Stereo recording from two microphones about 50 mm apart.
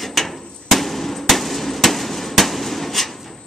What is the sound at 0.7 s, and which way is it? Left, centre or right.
Hammer, centre.